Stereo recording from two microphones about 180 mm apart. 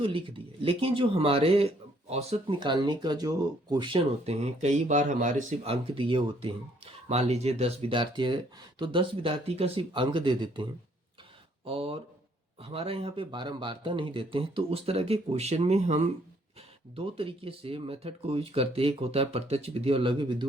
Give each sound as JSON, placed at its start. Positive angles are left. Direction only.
{"t": 0.0, "sound": "speech", "side_deg": -30}
{"t": 2.6, "sound": "speech", "side_deg": -25}